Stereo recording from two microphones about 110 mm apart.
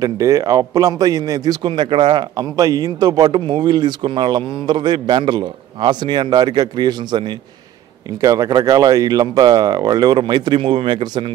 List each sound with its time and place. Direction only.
0.0 s speech: 30° right (ahead or behind)
1.7 s a man's voice: 50° right (ahead or behind)